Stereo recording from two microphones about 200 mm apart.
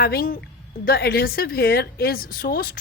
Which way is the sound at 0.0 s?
50° left (ahead or behind).